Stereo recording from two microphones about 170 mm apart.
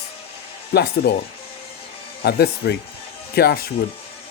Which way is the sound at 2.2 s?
70° left (ahead or behind).